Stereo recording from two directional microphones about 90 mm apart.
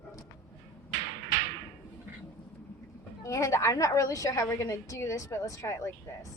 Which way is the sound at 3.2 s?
35° left (ahead or behind).